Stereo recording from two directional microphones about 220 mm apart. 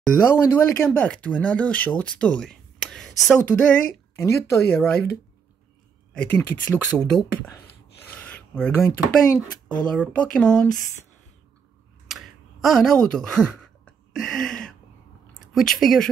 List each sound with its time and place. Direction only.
0.0 s speech: 10° left (ahead or behind)
6.1 s speech: 5° left (ahead or behind)
12.1 s a sound: centre (ahead or behind)
15.3 s speech: centre (ahead or behind)